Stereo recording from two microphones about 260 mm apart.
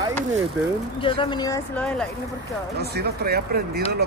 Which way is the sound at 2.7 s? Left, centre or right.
Right.